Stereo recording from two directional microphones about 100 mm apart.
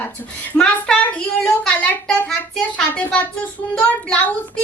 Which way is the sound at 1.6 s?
10° left (ahead or behind).